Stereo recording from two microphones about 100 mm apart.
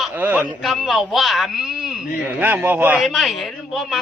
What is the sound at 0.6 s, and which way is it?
A woman's voice, centre (ahead or behind).